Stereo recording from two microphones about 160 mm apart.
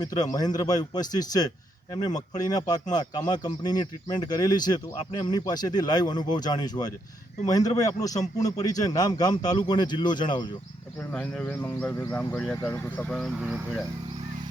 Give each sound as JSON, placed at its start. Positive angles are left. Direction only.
{"t": 0.3, "sound": "speech", "side_deg": 25}
{"t": 11.1, "sound": "speech", "side_deg": 5}
{"t": 13.1, "sound": "speech", "side_deg": 0}